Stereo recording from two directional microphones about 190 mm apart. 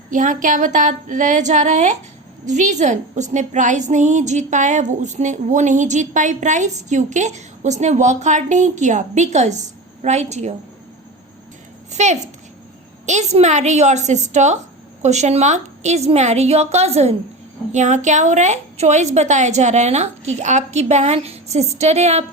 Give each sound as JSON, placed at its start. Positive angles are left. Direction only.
{"t": 0.1, "sound": "a woman's voice", "side_deg": -45}
{"t": 11.9, "sound": "a woman's voice", "side_deg": -35}